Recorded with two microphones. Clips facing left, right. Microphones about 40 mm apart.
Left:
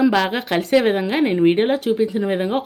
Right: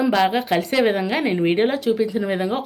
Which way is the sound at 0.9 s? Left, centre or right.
Left.